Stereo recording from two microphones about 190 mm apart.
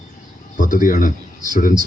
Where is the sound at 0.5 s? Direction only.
45° left (ahead or behind).